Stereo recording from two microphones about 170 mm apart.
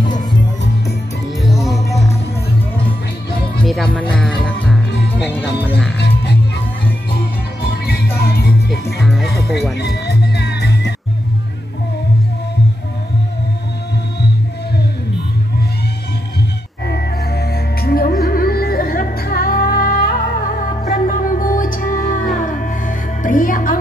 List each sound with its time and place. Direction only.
0.1 s music: 25° left (ahead or behind)
1.4 s music: centre (ahead or behind)
3.6 s music: 5° left (ahead or behind)
7.7 s music: 65° left (ahead or behind)
9.0 s music: centre (ahead or behind)
9.3 s music: 70° left (ahead or behind)
16.8 s music: 70° left (ahead or behind); by 23.8 s 50° left (ahead or behind)